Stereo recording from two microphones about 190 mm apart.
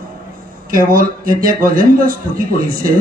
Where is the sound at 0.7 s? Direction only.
45° right (ahead or behind).